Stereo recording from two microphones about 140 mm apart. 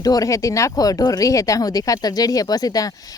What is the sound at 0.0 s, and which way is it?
Speech, 25° left (ahead or behind).